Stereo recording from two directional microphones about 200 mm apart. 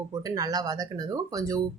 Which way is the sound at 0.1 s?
20° right (ahead or behind).